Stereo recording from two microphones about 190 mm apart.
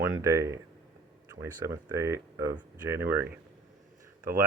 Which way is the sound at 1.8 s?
15° right (ahead or behind).